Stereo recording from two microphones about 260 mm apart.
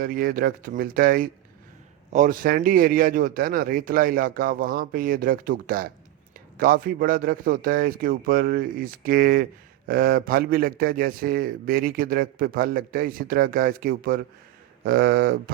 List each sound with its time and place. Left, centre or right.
0.0 s a man's voice: right